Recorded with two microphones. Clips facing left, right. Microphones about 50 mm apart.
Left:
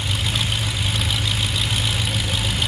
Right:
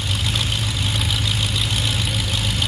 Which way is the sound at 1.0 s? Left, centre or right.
Centre.